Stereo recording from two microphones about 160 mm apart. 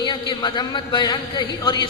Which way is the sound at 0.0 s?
30° left (ahead or behind).